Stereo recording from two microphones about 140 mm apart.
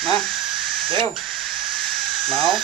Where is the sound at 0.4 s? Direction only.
5° right (ahead or behind).